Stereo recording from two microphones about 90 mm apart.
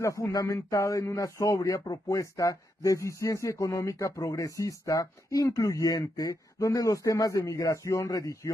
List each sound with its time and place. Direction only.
0.0 s speech: 35° left (ahead or behind)